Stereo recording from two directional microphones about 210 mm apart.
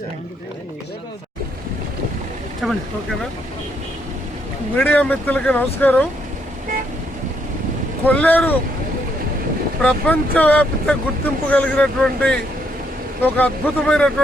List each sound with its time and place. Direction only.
2.6 s speech: centre (ahead or behind)
4.8 s speech: 10° left (ahead or behind)
8.0 s speech: 10° left (ahead or behind)
9.8 s speech: 5° left (ahead or behind)